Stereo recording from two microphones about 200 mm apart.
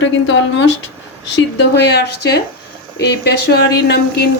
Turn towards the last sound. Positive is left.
turn(degrees=55)  # may be behind; listen again after turning